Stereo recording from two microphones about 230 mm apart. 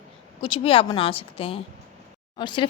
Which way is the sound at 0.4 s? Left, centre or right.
Left.